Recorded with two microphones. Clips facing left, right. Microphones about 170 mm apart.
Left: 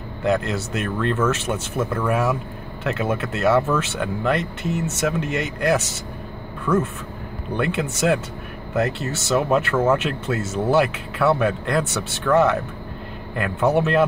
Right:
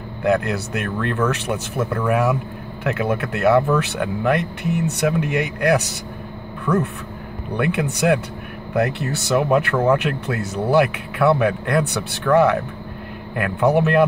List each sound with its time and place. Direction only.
0.5 s speech: centre (ahead or behind)
4.6 s speech: 65° right (ahead or behind)
5.1 s speech: centre (ahead or behind)
7.5 s speech: centre (ahead or behind)